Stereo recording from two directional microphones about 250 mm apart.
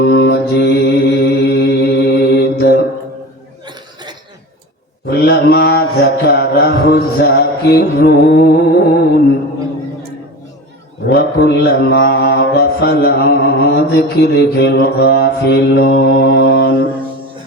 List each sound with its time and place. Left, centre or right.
0.0 s mantra: left
5.0 s a sound: left
11.0 s mantra: left